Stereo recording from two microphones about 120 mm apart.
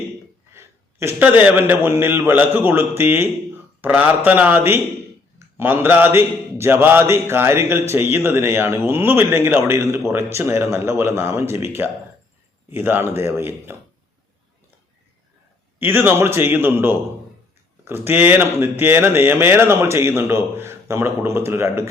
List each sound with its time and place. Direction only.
0.5 s a sound: 20° right (ahead or behind)
1.4 s a man's voice: 15° right (ahead or behind)
15.8 s a man's voice: 15° right (ahead or behind)